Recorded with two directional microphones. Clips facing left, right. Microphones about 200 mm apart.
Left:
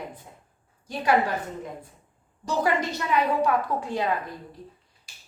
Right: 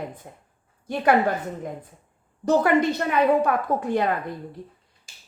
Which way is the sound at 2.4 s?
60° right (ahead or behind).